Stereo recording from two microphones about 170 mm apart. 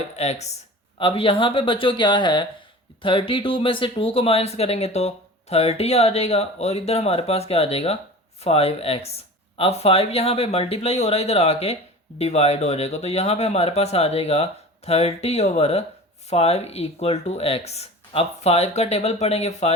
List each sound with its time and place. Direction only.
0.2 s speech: 40° left (ahead or behind)